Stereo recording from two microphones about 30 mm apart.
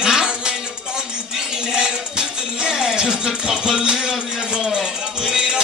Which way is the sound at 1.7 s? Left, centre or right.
Right.